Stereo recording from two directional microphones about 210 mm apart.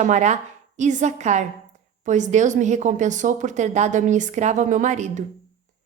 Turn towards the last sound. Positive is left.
turn(degrees=-35)  # may be behind; listen again after turning